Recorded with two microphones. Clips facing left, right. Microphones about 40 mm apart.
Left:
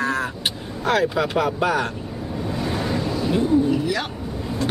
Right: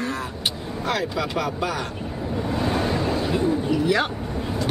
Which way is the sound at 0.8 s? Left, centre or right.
Left.